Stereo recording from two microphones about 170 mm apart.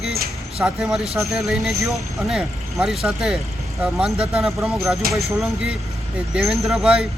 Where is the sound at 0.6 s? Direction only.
5° right (ahead or behind).